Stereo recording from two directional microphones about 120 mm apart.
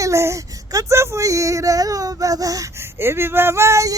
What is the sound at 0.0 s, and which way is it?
Female singing, 25° right (ahead or behind).